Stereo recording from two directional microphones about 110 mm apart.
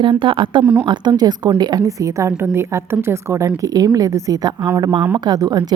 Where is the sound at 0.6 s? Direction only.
15° right (ahead or behind).